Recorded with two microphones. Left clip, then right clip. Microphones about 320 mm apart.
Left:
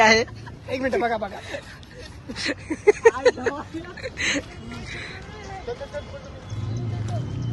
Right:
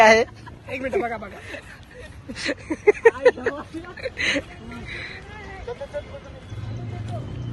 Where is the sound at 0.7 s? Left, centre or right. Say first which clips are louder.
Left 2 dB; left.